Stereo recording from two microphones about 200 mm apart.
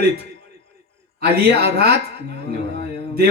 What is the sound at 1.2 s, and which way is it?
Speech, 55° right (ahead or behind).